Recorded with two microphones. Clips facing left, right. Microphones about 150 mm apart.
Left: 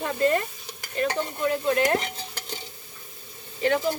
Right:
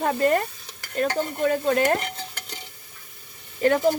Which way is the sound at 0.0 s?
50° right (ahead or behind).